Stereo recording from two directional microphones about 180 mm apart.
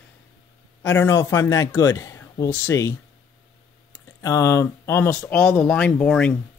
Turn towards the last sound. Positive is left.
turn(degrees=5)  # may be behind; listen again after turning